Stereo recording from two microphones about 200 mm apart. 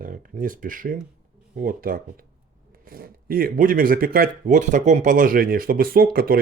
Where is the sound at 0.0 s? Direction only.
45° right (ahead or behind).